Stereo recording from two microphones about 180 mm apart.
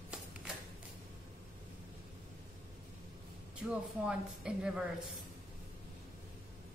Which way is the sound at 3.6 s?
5° right (ahead or behind).